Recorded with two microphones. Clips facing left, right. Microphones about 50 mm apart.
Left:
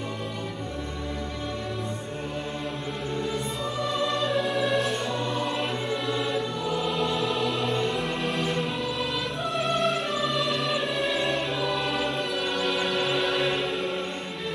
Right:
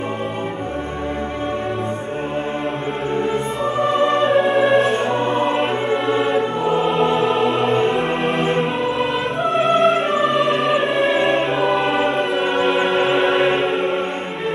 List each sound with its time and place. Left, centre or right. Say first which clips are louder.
3.8 s music: right 10 dB; right